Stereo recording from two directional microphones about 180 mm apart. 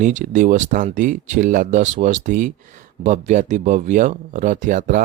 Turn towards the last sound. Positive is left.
turn(degrees=-45)  # may be behind; listen again after turning